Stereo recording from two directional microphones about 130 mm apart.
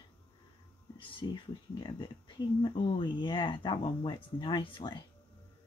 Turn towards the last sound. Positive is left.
turn(degrees=40)  # may be behind; listen again after turning